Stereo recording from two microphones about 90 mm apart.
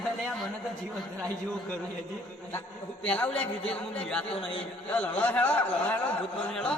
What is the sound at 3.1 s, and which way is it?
A man's voice, 15° left (ahead or behind).